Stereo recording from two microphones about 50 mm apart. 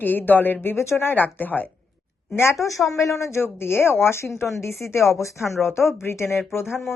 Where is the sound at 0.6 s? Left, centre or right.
Left.